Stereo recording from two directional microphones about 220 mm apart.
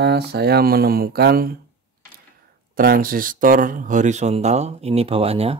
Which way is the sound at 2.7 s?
40° right (ahead or behind).